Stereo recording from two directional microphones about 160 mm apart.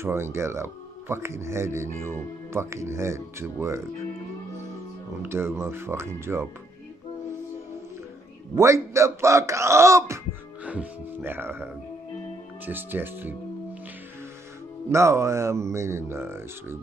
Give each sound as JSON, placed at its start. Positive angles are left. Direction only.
{"t": 0.0, "sound": "speech", "side_deg": -15}
{"t": 5.2, "sound": "speech", "side_deg": -15}
{"t": 8.5, "sound": "speech", "side_deg": -20}
{"t": 14.9, "sound": "speech", "side_deg": -20}